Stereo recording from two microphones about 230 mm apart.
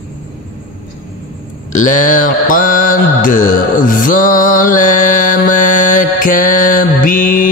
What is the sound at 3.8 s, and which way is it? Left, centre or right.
Music, left.